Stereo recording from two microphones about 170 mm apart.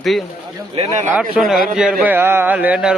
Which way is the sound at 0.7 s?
40° right (ahead or behind).